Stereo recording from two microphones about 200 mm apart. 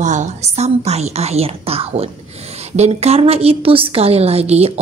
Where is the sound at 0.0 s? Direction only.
35° right (ahead or behind).